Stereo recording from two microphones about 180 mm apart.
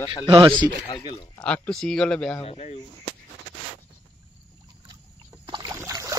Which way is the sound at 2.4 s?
35° left (ahead or behind).